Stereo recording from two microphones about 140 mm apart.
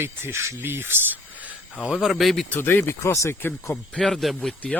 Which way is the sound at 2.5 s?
15° left (ahead or behind).